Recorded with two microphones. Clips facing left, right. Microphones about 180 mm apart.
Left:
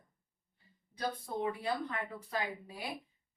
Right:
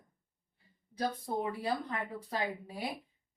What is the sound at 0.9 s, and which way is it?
Speech, 40° right (ahead or behind).